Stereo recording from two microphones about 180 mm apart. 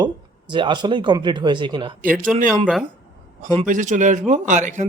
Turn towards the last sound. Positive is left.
turn(degrees=-45)  # may be behind; listen again after turning